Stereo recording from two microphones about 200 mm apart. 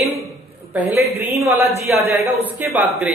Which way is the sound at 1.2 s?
10° right (ahead or behind).